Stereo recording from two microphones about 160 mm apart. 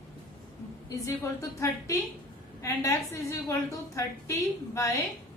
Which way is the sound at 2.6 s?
20° left (ahead or behind).